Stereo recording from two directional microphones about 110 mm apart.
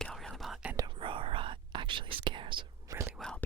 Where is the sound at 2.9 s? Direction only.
25° right (ahead or behind).